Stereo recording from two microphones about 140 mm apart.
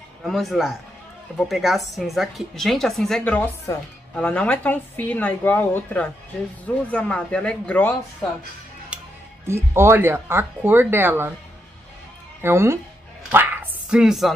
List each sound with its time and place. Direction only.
0.2 s a man's voice: centre (ahead or behind)
8.9 s music: 10° right (ahead or behind)
9.5 s speech: 15° right (ahead or behind)
12.4 s speech: 20° right (ahead or behind)
13.3 s a sound: 15° right (ahead or behind)